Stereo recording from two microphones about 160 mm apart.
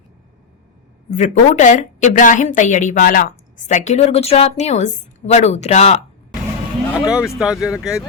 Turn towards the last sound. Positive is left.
turn(degrees=-5)  # may be behind; listen again after turning